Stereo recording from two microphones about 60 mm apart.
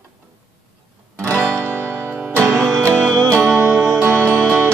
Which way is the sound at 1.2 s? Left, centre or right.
Right.